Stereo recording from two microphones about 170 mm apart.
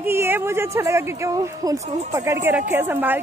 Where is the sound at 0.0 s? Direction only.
15° right (ahead or behind).